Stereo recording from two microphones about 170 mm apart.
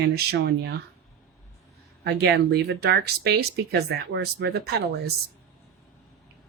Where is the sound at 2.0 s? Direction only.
75° right (ahead or behind).